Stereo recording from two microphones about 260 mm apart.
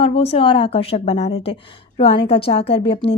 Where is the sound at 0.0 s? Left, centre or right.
Left.